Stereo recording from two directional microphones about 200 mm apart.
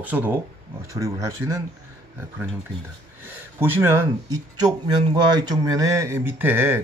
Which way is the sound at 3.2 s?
10° right (ahead or behind).